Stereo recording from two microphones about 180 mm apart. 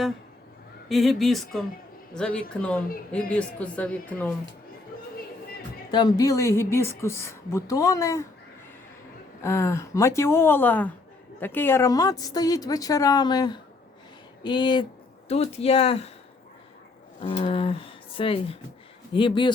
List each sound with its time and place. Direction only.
0.9 s a woman's voice: centre (ahead or behind)
5.9 s a woman's voice: 25° left (ahead or behind)
9.4 s a woman's voice: 15° left (ahead or behind); by 16.1 s 35° left (ahead or behind)
17.2 s cattle: 30° left (ahead or behind)
19.1 s speech: 25° left (ahead or behind)